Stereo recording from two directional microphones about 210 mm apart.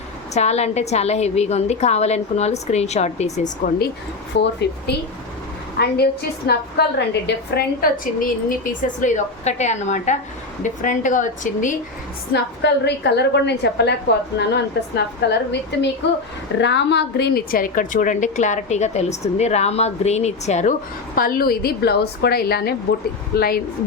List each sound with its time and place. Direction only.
0.3 s a woman's voice: 30° left (ahead or behind)
4.3 s speech: 60° left (ahead or behind)
5.8 s a woman's voice: 50° left (ahead or behind)
12.3 s a woman's voice: 55° left (ahead or behind); by 20.7 s 35° left (ahead or behind)
21.2 s a woman's voice: 45° left (ahead or behind)